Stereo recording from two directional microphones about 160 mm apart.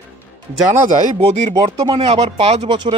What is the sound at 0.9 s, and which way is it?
Speech, 45° right (ahead or behind).